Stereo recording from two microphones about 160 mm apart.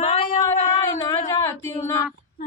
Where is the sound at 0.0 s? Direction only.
35° left (ahead or behind).